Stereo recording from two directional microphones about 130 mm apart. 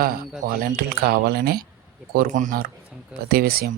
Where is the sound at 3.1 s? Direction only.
5° right (ahead or behind).